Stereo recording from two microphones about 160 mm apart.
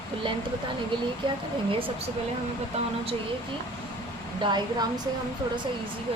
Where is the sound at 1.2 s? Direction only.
30° right (ahead or behind).